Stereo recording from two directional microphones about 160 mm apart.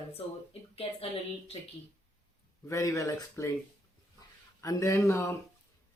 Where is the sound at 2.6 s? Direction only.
20° left (ahead or behind).